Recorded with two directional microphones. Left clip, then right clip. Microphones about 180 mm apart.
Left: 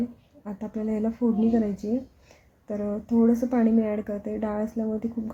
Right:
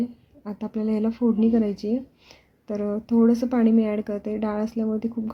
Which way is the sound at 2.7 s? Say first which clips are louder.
Right 3 dB; 15° right (ahead or behind).